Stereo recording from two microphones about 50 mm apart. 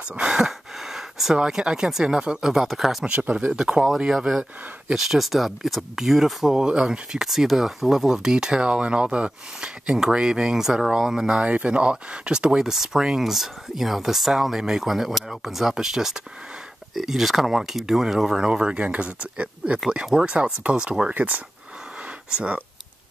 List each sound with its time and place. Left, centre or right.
0.1 s a sound: centre
1.4 s speech: centre
3.1 s speech: right
3.4 s speech: centre
21.1 s speech: right